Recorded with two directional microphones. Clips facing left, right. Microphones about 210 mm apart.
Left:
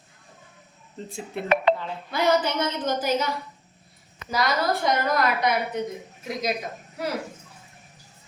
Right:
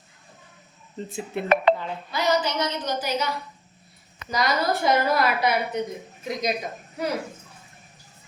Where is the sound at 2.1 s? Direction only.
55° left (ahead or behind).